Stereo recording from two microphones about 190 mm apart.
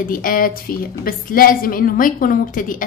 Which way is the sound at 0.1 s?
50° left (ahead or behind).